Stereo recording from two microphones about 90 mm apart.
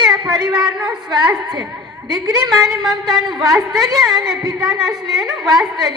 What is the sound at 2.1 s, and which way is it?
Speech, 50° right (ahead or behind).